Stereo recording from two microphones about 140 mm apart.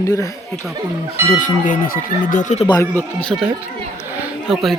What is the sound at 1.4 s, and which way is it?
Speech, 70° left (ahead or behind).